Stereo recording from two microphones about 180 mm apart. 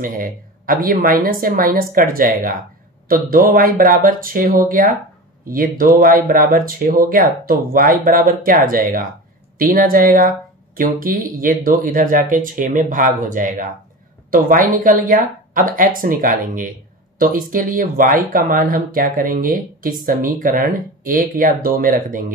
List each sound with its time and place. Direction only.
0.0 s speech: 50° right (ahead or behind)